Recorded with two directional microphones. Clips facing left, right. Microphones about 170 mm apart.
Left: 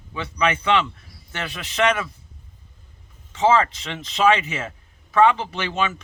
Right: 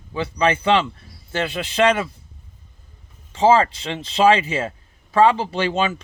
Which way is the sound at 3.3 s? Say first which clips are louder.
Right 3 dB; 30° right (ahead or behind).